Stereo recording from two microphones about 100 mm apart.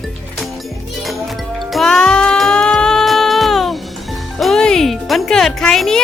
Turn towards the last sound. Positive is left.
turn(degrees=5)  # may be behind; listen again after turning